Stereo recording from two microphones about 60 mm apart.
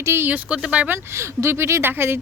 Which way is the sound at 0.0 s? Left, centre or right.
Right.